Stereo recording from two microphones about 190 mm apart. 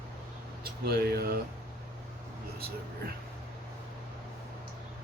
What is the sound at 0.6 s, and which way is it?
Speech, 55° right (ahead or behind).